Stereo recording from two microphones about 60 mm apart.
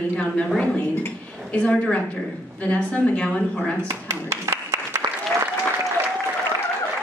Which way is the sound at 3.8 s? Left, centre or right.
Right.